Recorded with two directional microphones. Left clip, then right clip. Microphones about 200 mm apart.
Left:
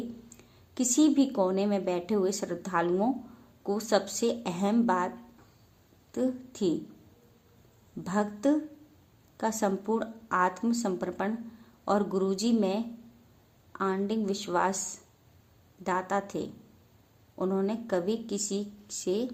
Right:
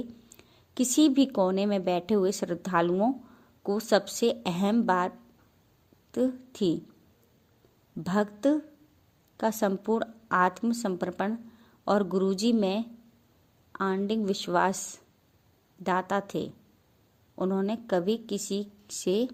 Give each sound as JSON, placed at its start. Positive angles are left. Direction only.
{"t": 0.3, "sound": "a woman's voice", "side_deg": -40}
{"t": 8.0, "sound": "a woman's voice", "side_deg": -40}